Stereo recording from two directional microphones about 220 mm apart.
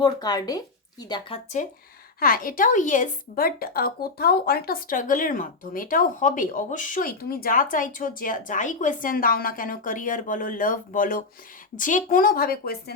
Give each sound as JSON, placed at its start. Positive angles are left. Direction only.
{"t": 0.0, "sound": "speech", "side_deg": 20}
{"t": 1.6, "sound": "a woman's voice", "side_deg": 35}